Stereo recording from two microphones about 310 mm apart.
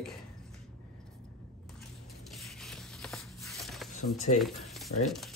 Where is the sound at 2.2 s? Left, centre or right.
Centre.